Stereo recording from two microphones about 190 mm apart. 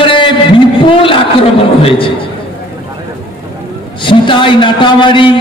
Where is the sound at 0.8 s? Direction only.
25° left (ahead or behind).